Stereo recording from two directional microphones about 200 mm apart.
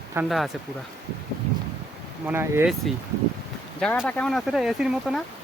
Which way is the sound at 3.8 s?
5° left (ahead or behind).